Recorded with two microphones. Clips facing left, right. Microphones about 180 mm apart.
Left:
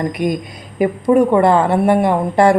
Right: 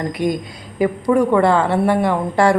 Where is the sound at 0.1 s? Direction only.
20° left (ahead or behind).